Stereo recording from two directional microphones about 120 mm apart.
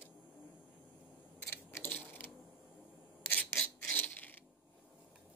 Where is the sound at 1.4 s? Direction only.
20° left (ahead or behind).